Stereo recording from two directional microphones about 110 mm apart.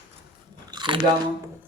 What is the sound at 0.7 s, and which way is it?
Biting, 45° right (ahead or behind).